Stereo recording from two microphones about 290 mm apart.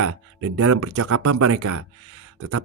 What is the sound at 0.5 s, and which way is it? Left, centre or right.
Speech, right.